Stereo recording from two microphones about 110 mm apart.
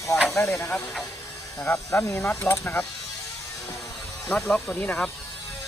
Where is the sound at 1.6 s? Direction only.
25° left (ahead or behind).